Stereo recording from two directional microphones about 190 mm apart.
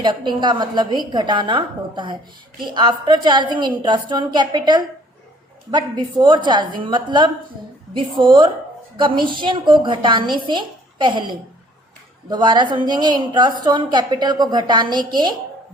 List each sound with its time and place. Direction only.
0.0 s a woman's voice: 25° right (ahead or behind)